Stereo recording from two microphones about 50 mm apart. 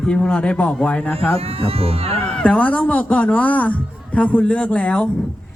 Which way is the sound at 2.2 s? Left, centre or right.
Left.